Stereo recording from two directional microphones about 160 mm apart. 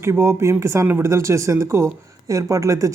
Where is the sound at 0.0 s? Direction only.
15° right (ahead or behind).